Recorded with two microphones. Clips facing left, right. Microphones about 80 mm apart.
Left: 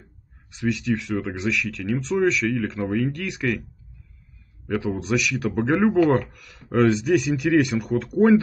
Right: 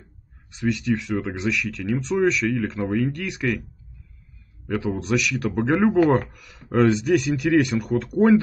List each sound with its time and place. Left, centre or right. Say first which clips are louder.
0.0 s speech: even; centre
4.6 s speech: even; centre